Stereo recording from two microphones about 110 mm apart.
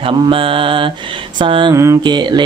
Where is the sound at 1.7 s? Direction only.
25° right (ahead or behind).